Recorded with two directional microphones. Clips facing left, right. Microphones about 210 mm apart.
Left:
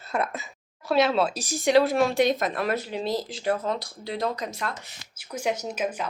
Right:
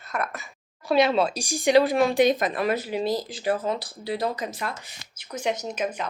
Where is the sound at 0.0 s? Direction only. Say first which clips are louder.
Left 2 dB; 25° left (ahead or behind).